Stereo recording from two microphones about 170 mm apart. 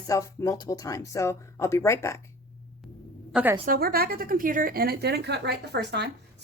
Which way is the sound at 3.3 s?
5° right (ahead or behind).